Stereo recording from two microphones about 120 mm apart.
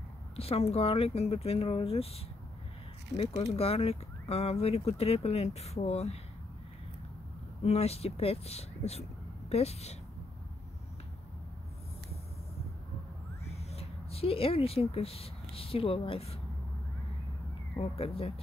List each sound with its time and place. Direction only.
0.4 s speech: 55° left (ahead or behind)
7.6 s speech: 60° left (ahead or behind)
13.5 s speech: 60° left (ahead or behind)
17.7 s speech: 55° left (ahead or behind)